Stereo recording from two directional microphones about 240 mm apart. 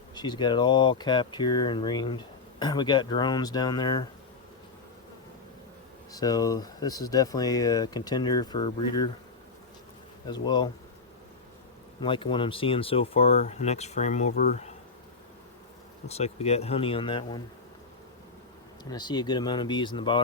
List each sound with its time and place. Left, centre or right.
0.1 s speech: centre
6.1 s speech: centre
10.2 s speech: centre
11.9 s speech: left
16.0 s speech: left
18.9 s speech: centre